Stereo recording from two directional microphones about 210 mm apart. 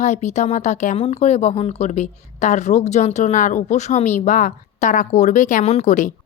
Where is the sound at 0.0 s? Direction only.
35° left (ahead or behind).